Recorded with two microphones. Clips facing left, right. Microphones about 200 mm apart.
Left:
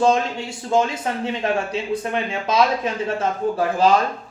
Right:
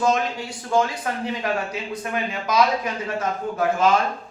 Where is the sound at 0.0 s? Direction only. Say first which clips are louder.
Left 3 dB; 25° left (ahead or behind).